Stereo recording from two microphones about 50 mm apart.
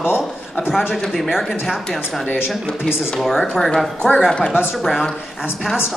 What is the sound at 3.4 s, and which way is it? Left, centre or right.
Speech, centre.